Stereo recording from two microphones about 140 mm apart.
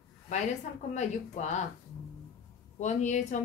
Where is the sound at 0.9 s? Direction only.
55° left (ahead or behind).